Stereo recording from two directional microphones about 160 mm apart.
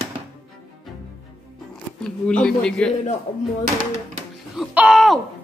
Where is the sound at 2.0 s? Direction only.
5° left (ahead or behind).